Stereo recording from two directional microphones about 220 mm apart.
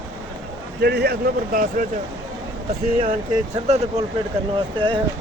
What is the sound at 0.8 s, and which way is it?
Speech, 45° right (ahead or behind).